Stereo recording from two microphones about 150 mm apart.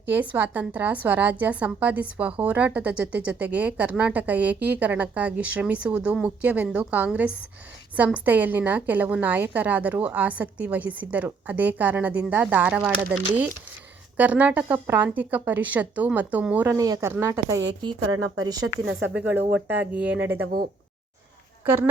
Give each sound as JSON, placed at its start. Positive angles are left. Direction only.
{"t": 0.1, "sound": "a woman's voice", "side_deg": -10}
{"t": 16.7, "sound": "a woman's voice", "side_deg": -20}
{"t": 19.1, "sound": "a woman's voice", "side_deg": -10}